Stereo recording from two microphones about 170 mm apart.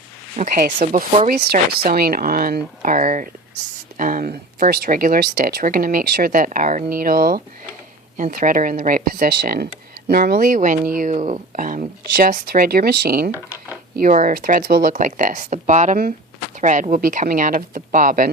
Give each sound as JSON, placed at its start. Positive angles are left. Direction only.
{"t": 0.3, "sound": "speech", "side_deg": -50}
{"t": 1.5, "sound": "speech", "side_deg": -60}
{"t": 13.3, "sound": "speech", "side_deg": -10}
{"t": 13.9, "sound": "speech", "side_deg": -50}